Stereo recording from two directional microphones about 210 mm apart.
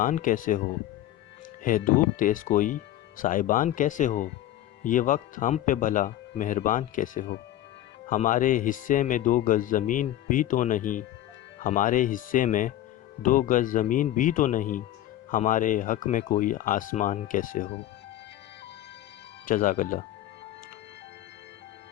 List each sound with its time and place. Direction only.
0.0 s speech: 40° left (ahead or behind)
1.6 s speech: 40° left (ahead or behind)
19.5 s speech: 40° left (ahead or behind)